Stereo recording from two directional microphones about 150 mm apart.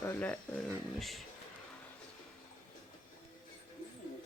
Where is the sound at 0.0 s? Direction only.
15° left (ahead or behind).